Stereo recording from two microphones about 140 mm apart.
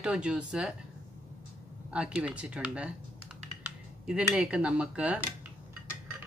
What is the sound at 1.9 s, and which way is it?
Speech, 5° right (ahead or behind).